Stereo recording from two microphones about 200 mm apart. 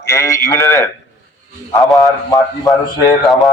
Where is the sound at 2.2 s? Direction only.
15° left (ahead or behind).